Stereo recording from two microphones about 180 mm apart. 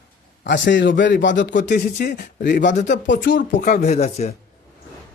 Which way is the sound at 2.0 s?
55° left (ahead or behind).